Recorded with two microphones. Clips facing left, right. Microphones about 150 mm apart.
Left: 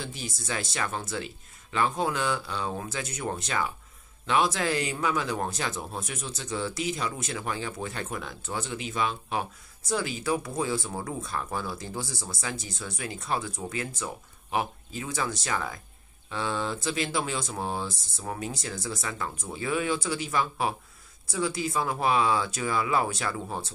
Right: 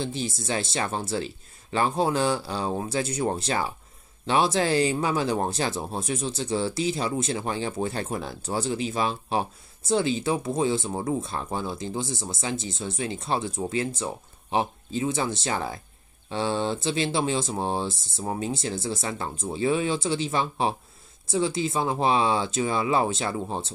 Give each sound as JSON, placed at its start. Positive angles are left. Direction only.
{"t": 0.0, "sound": "speech", "side_deg": -30}